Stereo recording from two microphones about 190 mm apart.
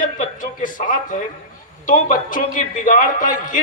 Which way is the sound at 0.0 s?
45° left (ahead or behind).